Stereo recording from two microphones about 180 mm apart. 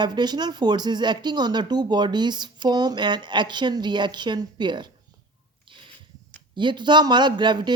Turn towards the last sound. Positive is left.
turn(degrees=-25)  # may be behind; listen again after turning